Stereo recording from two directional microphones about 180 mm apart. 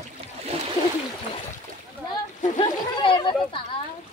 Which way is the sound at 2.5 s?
25° left (ahead or behind).